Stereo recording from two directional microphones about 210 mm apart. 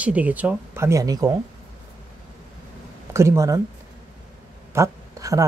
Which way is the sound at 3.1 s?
15° right (ahead or behind).